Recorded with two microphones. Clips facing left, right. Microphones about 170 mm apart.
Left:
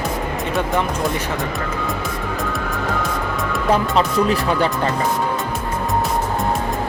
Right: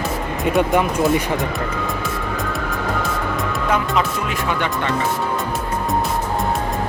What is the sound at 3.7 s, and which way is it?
Speech, 35° left (ahead or behind).